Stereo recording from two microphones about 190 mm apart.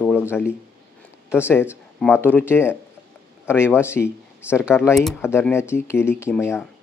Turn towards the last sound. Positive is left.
turn(degrees=15)  # may be behind; listen again after turning